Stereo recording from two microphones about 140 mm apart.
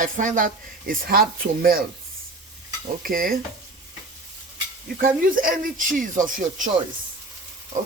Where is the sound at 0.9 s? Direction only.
90° right.